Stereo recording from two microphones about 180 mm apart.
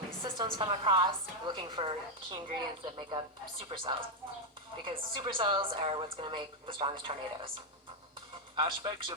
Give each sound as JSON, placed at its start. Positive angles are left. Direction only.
{"t": 0.3, "sound": "a woman's voice", "side_deg": -25}
{"t": 3.7, "sound": "speech", "side_deg": -40}
{"t": 4.9, "sound": "a woman's voice", "side_deg": -30}
{"t": 8.5, "sound": "a woman's voice", "side_deg": -25}